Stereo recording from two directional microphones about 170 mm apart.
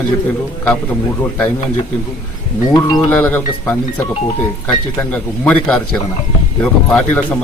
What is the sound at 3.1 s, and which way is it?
Speech, 10° left (ahead or behind).